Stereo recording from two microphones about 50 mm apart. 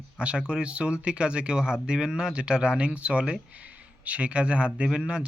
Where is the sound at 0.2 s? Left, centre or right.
Right.